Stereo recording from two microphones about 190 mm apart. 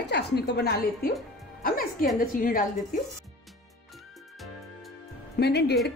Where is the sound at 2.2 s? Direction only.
45° left (ahead or behind).